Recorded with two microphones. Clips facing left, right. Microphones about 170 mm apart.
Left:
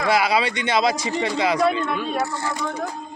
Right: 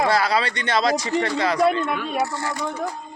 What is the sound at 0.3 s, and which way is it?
Speech, 10° left (ahead or behind).